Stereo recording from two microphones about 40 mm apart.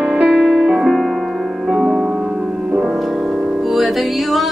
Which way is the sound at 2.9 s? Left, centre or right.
Centre.